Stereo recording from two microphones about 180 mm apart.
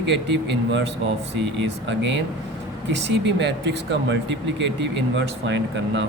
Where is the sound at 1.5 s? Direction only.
90° right.